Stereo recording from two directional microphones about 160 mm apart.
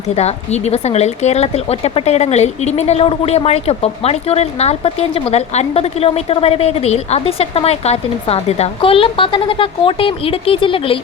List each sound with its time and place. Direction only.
0.2 s speech: 40° left (ahead or behind)